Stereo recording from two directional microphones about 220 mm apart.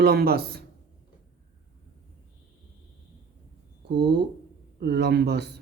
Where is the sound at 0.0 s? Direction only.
45° right (ahead or behind).